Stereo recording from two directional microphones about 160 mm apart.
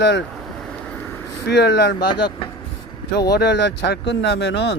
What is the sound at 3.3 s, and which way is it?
Speech, 90° left.